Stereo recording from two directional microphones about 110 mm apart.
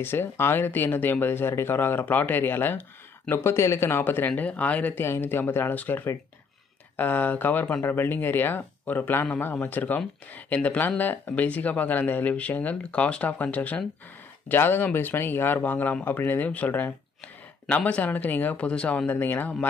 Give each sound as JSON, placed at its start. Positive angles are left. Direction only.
{"t": 0.0, "sound": "speech", "side_deg": 20}